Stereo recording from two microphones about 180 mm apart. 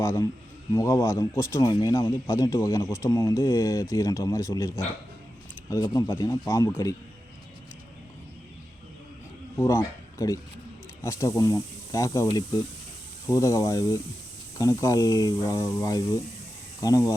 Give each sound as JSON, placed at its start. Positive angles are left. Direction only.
{"t": 0.0, "sound": "a man's voice", "side_deg": 15}
{"t": 9.6, "sound": "speech", "side_deg": 15}